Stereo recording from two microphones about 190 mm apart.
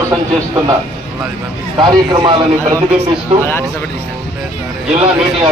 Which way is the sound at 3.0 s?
10° left (ahead or behind).